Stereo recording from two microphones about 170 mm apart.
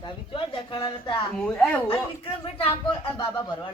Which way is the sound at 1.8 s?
30° left (ahead or behind).